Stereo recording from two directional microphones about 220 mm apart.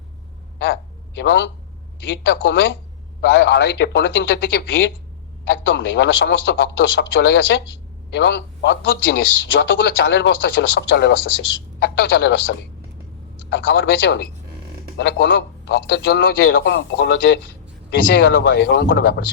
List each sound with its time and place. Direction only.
0.6 s a man's voice: 55° left (ahead or behind)